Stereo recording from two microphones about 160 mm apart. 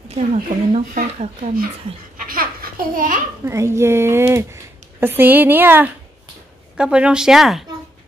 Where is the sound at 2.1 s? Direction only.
60° right (ahead or behind).